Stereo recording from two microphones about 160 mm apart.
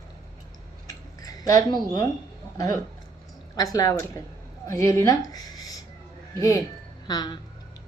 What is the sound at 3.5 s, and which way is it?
A woman's voice, 25° left (ahead or behind).